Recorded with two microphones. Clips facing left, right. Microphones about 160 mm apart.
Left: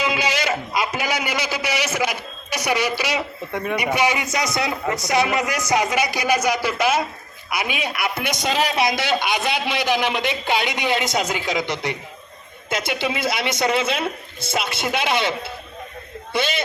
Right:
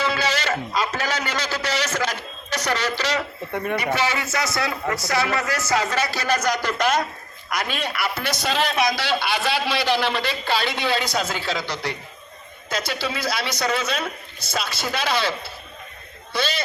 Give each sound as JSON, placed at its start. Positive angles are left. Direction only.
{"t": 0.0, "sound": "a sound", "side_deg": 15}
{"t": 3.5, "sound": "a man's voice", "side_deg": 0}
{"t": 3.8, "sound": "a man's voice", "side_deg": 15}
{"t": 8.4, "sound": "a man's voice", "side_deg": 5}
{"t": 8.8, "sound": "a man's voice", "side_deg": 20}